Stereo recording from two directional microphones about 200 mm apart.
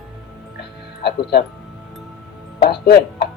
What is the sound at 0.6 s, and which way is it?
Music, 55° left (ahead or behind).